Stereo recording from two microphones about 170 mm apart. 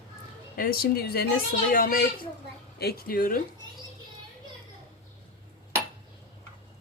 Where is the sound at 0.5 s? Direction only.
60° left (ahead or behind).